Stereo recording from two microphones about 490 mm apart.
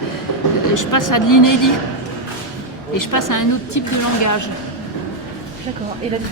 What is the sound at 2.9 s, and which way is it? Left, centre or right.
Speech, left.